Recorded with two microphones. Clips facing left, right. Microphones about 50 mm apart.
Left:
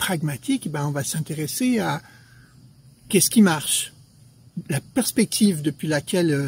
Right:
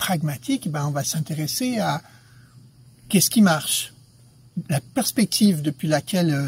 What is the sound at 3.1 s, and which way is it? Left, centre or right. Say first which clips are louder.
Speech: even; centre.